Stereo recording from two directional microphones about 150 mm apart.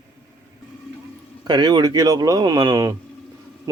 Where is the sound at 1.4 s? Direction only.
30° right (ahead or behind).